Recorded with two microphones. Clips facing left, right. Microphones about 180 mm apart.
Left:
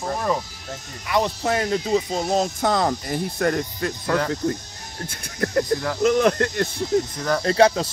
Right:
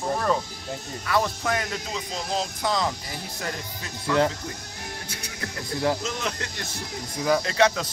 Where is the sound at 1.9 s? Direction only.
45° left (ahead or behind).